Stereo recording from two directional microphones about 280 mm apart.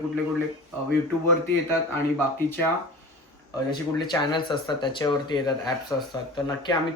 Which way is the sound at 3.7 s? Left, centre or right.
Centre.